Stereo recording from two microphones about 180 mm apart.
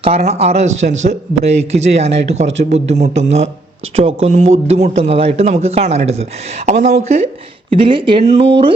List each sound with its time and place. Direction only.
0.0 s speech: 35° right (ahead or behind)
7.7 s speech: 30° right (ahead or behind)